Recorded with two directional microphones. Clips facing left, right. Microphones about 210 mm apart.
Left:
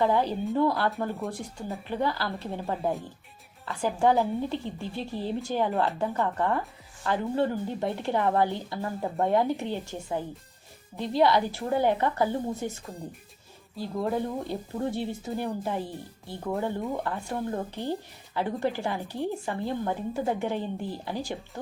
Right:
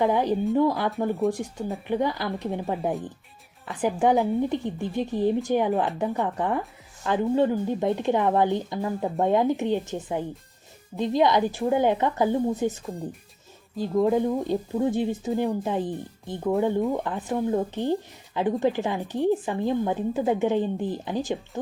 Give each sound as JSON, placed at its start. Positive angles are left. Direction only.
{"t": 0.0, "sound": "speech", "side_deg": -15}